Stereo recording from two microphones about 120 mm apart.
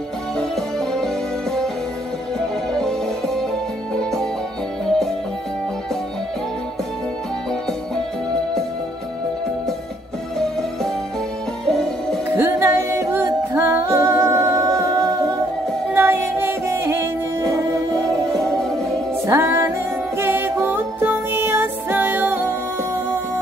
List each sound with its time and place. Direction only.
0.4 s music: 5° left (ahead or behind)
11.6 s music: 5° left (ahead or behind)
12.4 s music: 20° right (ahead or behind)
19.2 s music: 25° right (ahead or behind)